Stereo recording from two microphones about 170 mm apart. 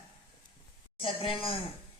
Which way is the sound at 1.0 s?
30° left (ahead or behind).